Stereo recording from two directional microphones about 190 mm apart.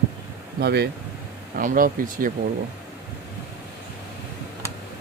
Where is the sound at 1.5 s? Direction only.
45° right (ahead or behind).